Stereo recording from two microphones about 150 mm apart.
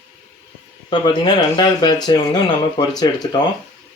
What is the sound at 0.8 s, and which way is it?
Speech, 30° left (ahead or behind).